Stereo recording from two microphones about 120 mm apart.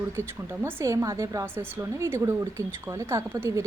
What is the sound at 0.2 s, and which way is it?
A woman's voice, 20° right (ahead or behind).